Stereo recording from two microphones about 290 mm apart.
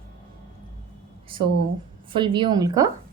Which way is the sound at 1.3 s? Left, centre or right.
Centre.